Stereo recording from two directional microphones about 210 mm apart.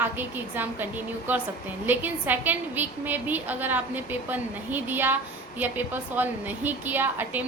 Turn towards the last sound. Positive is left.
turn(degrees=-10)  # may be behind; listen again after turning